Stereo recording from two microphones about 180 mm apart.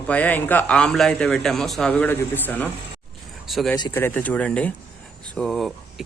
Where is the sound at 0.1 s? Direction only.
10° left (ahead or behind).